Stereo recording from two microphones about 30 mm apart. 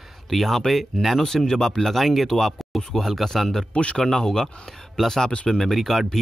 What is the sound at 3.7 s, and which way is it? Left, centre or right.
Speech, left.